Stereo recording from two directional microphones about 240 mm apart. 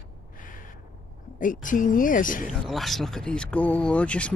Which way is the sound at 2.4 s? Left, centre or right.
Centre.